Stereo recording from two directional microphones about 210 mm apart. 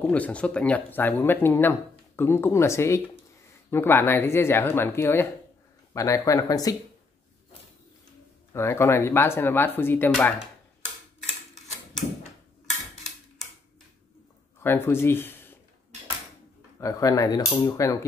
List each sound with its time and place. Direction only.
0.0 s speech: 5° left (ahead or behind)
8.5 s speech: 10° left (ahead or behind)
14.6 s speech: 10° left (ahead or behind)
16.8 s speech: 15° left (ahead or behind)